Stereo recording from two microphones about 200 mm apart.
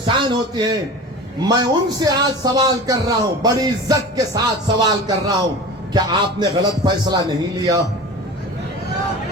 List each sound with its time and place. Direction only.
0.0 s a man's voice: 25° right (ahead or behind)